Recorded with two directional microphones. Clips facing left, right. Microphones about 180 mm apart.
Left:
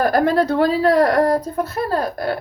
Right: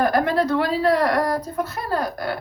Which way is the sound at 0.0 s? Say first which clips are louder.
Left 3 dB; 35° left (ahead or behind).